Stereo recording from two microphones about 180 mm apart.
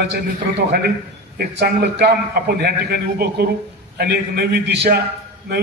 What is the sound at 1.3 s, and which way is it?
A man's voice, 65° right (ahead or behind).